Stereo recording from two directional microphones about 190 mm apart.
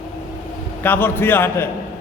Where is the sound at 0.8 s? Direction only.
10° left (ahead or behind).